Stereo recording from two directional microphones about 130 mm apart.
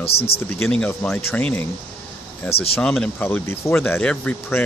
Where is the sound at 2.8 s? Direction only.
10° left (ahead or behind).